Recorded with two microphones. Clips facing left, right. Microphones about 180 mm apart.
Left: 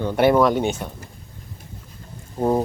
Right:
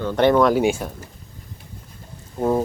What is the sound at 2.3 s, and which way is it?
Speech, 15° left (ahead or behind).